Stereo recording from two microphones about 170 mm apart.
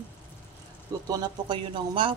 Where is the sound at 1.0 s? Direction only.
25° right (ahead or behind).